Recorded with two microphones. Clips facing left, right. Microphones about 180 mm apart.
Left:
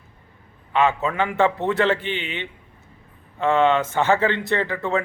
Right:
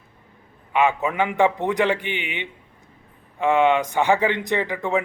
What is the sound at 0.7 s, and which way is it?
Speech, 15° right (ahead or behind).